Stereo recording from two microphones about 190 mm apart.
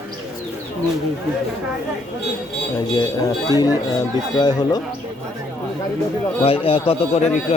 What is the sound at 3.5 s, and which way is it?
A man's voice, 20° left (ahead or behind).